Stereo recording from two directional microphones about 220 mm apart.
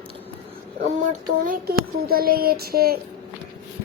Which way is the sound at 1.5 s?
45° right (ahead or behind).